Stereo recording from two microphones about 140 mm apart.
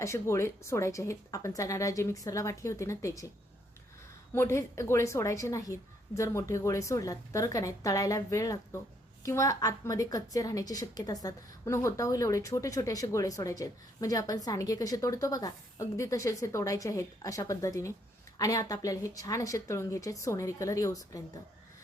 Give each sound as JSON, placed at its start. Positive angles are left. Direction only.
{"t": 0.0, "sound": "a woman's voice", "side_deg": 20}
{"t": 4.4, "sound": "a woman's voice", "side_deg": 20}